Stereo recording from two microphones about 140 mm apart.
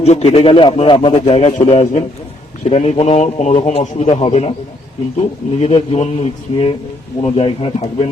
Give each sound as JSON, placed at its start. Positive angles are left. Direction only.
{"t": 0.0, "sound": "a man's voice", "side_deg": 50}
{"t": 5.5, "sound": "a man's voice", "side_deg": 45}